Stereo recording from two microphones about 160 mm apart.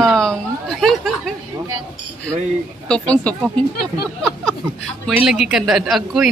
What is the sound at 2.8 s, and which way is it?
Speech, 5° left (ahead or behind).